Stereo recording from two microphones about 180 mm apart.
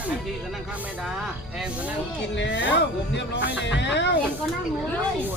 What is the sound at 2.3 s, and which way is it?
Speech, 90° left.